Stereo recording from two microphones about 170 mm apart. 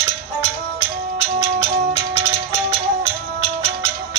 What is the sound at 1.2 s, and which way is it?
Music, 35° right (ahead or behind).